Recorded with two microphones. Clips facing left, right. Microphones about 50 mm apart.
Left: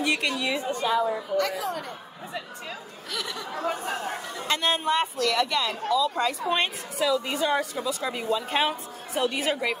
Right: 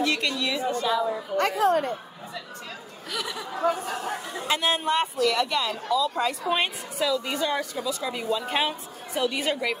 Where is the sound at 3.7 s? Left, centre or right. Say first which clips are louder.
Right 1 dB; left.